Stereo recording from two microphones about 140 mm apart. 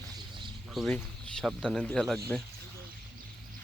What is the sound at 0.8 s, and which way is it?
Speech, centre (ahead or behind).